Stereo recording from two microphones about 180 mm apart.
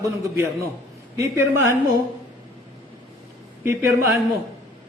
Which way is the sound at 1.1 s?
15° right (ahead or behind).